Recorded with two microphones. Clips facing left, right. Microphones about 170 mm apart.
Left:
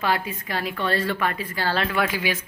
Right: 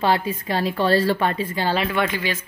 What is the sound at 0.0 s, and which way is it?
A woman's voice, 30° right (ahead or behind).